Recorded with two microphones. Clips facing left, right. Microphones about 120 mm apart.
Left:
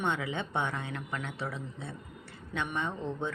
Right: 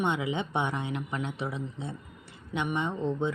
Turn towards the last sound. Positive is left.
turn(degrees=-20)  # may be behind; listen again after turning